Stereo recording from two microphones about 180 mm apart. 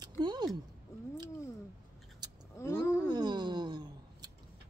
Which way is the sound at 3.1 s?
25° right (ahead or behind).